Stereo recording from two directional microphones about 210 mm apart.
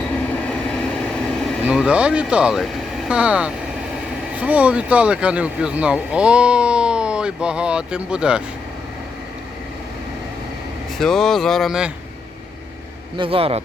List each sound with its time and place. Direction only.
1.5 s speech: 5° right (ahead or behind)
10.9 s speech: centre (ahead or behind)
13.1 s speech: 25° right (ahead or behind)